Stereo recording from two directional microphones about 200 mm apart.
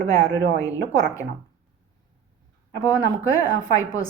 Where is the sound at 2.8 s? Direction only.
15° left (ahead or behind).